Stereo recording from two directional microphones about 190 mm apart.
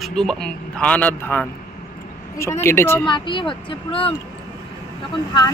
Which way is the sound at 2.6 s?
10° left (ahead or behind).